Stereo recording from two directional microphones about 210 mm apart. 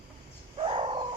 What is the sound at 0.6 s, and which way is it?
Bird, 25° right (ahead or behind).